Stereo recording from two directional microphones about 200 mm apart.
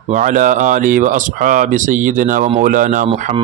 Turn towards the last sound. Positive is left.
turn(degrees=-40)  # may be behind; listen again after turning